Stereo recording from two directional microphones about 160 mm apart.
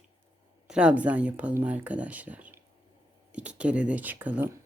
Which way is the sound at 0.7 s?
5° right (ahead or behind).